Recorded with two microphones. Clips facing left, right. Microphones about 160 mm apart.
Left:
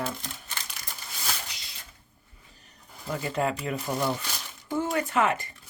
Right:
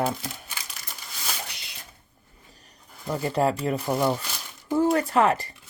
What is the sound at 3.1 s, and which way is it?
Speech, 35° right (ahead or behind).